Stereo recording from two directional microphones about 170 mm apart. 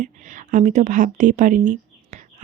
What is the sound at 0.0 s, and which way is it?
Speech, 50° right (ahead or behind).